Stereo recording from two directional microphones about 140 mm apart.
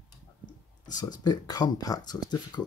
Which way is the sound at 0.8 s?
30° left (ahead or behind).